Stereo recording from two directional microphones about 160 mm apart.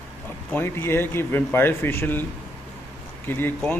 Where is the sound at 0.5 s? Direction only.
15° left (ahead or behind).